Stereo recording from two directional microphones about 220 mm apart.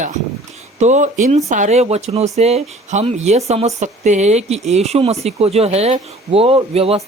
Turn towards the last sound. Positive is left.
turn(degrees=-25)  # may be behind; listen again after turning